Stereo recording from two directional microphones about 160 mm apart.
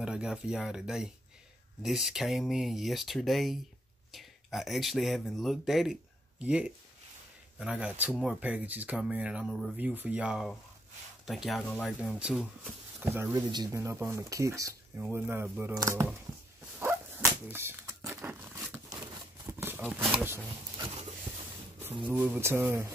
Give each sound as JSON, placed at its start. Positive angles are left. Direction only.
{"t": 0.0, "sound": "speech", "side_deg": -5}
{"t": 13.0, "sound": "speech", "side_deg": -15}
{"t": 16.8, "sound": "dog", "side_deg": -15}
{"t": 18.1, "sound": "a sound", "side_deg": -10}
{"t": 19.9, "sound": "speech", "side_deg": 0}
{"t": 20.2, "sound": "a sound", "side_deg": -15}
{"t": 22.0, "sound": "speech", "side_deg": -10}